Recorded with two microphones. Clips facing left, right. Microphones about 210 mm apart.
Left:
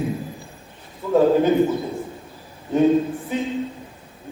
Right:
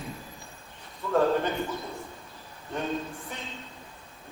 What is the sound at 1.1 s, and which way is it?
Speech, 10° left (ahead or behind).